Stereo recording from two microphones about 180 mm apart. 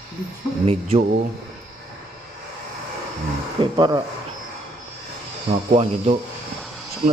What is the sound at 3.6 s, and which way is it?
Speech, 25° right (ahead or behind).